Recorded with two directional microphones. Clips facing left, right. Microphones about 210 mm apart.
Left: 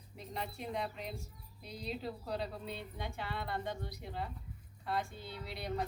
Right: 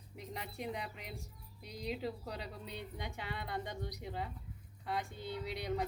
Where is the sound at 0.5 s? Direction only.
15° right (ahead or behind).